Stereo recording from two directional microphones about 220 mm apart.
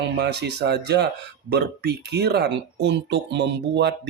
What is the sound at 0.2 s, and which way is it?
Speech, 50° right (ahead or behind).